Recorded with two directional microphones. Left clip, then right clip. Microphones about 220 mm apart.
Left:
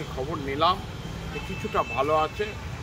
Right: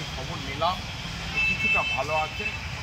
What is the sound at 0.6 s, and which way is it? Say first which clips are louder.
Speech: left 3 dB; 25° left (ahead or behind).